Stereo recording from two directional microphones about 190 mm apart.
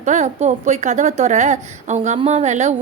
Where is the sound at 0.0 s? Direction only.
40° right (ahead or behind).